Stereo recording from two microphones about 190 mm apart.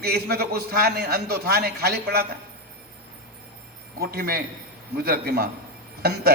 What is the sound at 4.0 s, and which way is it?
A man's voice, 55° right (ahead or behind).